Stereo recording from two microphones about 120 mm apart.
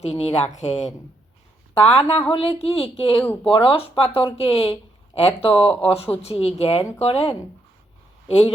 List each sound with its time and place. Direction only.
0.0 s speech: 60° left (ahead or behind)
1.8 s speech: 55° left (ahead or behind)